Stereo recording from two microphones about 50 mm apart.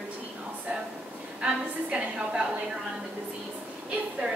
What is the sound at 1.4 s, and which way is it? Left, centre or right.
A woman's voice, right.